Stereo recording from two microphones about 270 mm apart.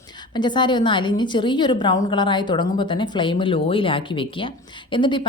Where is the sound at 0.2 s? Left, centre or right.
Centre.